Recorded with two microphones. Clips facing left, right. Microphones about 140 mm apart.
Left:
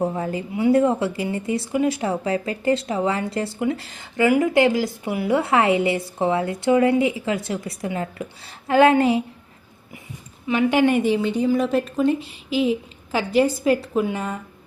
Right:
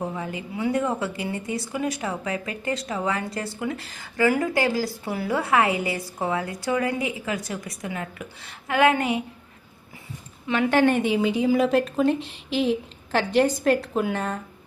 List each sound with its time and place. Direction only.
0.0 s a woman's voice: 35° left (ahead or behind)
10.4 s a woman's voice: 5° left (ahead or behind)